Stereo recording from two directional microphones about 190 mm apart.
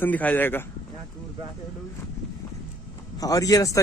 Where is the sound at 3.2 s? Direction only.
20° left (ahead or behind).